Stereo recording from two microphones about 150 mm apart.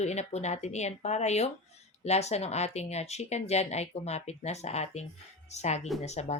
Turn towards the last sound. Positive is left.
turn(degrees=45)  # may be behind; listen again after turning